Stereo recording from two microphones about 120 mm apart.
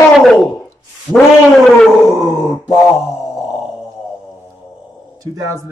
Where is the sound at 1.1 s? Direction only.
Centre (ahead or behind).